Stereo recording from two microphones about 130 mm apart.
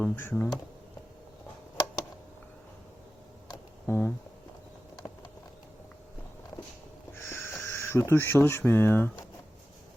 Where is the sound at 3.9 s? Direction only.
15° left (ahead or behind).